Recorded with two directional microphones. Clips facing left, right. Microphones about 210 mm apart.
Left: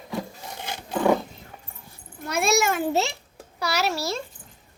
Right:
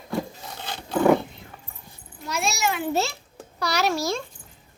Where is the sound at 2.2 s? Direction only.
55° left (ahead or behind).